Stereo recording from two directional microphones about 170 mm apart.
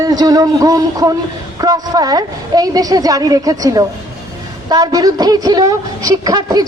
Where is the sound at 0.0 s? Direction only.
20° right (ahead or behind).